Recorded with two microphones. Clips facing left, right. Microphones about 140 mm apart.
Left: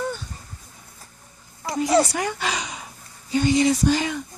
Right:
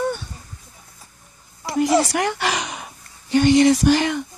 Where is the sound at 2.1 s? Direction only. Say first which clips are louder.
Right 4 dB; 70° right (ahead or behind).